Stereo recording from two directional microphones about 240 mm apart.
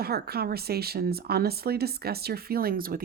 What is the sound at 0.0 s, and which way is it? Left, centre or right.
Speech, right.